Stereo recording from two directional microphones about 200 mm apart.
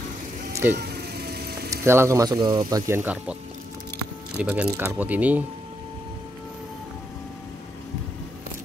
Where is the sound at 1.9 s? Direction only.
15° right (ahead or behind).